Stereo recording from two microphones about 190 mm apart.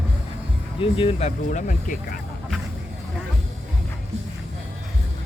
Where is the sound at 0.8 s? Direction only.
30° left (ahead or behind).